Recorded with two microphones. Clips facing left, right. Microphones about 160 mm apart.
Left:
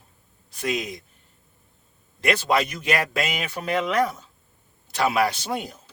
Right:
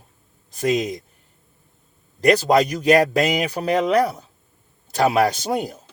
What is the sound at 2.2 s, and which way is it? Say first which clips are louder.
Speech: right 7 dB; 40° right (ahead or behind).